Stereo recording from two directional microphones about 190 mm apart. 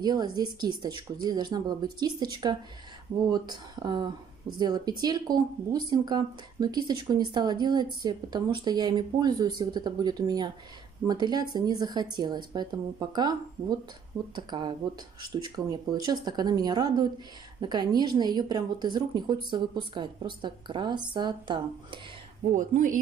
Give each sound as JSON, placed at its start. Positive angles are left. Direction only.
{"t": 0.0, "sound": "speech", "side_deg": -20}
{"t": 22.5, "sound": "speech", "side_deg": -45}